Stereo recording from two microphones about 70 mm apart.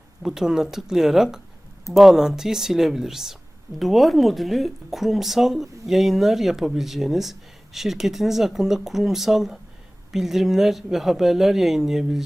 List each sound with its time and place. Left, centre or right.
0.2 s speech: centre